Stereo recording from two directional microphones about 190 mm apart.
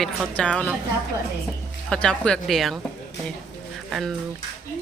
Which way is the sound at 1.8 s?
5° left (ahead or behind).